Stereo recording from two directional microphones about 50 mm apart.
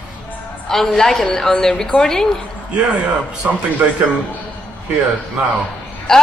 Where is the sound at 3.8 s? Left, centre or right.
Right.